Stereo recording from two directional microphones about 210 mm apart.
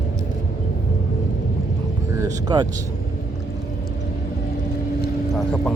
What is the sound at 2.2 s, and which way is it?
Speech, 20° right (ahead or behind).